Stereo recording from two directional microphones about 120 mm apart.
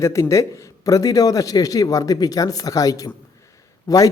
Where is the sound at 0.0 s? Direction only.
25° left (ahead or behind).